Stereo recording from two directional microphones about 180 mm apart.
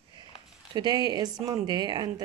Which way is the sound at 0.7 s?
25° right (ahead or behind).